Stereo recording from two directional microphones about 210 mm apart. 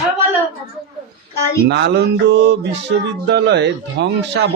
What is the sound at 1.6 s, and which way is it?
A man's voice, 55° right (ahead or behind).